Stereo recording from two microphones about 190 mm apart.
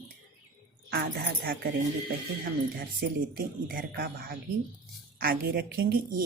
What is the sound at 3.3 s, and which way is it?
A woman's voice, 50° right (ahead or behind).